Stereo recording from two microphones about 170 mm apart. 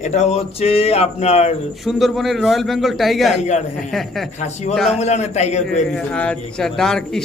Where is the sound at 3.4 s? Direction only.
40° left (ahead or behind).